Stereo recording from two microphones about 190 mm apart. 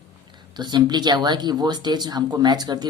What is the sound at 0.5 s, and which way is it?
A man's voice, 20° right (ahead or behind).